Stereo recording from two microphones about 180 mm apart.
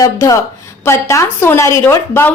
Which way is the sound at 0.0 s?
20° left (ahead or behind).